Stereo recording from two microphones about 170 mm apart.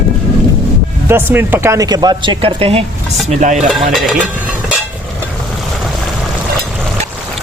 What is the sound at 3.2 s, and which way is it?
Stir, 45° right (ahead or behind).